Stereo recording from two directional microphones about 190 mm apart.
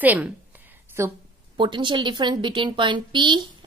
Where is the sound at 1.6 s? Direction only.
25° right (ahead or behind).